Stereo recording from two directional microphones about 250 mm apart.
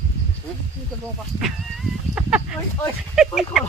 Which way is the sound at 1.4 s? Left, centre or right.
Centre.